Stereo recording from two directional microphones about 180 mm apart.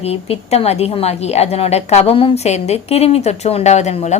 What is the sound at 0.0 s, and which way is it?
A woman's voice, 35° left (ahead or behind).